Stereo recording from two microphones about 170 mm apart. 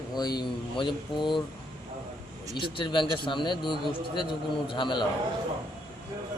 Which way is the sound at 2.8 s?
30° left (ahead or behind).